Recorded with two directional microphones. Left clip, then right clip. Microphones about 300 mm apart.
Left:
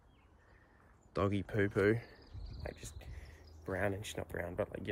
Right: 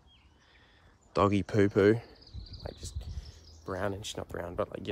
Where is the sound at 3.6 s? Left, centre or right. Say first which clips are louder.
Right 3 dB; centre.